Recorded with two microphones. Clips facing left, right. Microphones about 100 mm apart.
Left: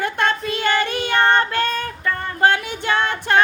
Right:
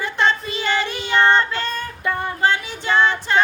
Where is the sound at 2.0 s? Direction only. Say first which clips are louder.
Right 3 dB; 15° right (ahead or behind).